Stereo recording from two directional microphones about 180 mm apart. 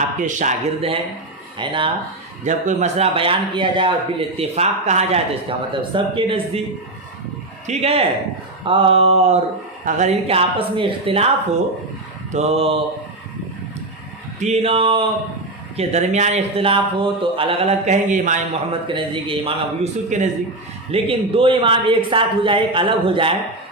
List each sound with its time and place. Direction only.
0.2 s speech: 45° right (ahead or behind)
1.5 s speech: 25° right (ahead or behind)
2.4 s a man's voice: 45° right (ahead or behind); by 3.9 s 25° right (ahead or behind)
4.4 s a man's voice: 40° right (ahead or behind)
7.7 s a man's voice: 35° right (ahead or behind)
12.3 s a man's voice: 35° right (ahead or behind)
14.3 s a man's voice: 40° right (ahead or behind)
18.7 s a man's voice: 30° right (ahead or behind)